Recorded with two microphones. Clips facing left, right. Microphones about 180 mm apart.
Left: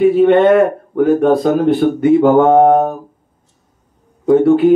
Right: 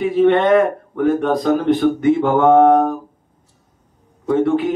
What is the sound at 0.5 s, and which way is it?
Speech, 50° left (ahead or behind).